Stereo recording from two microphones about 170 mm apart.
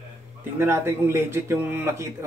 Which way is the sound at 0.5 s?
15° right (ahead or behind).